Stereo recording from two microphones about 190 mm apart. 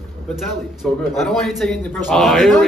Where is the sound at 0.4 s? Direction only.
Centre (ahead or behind).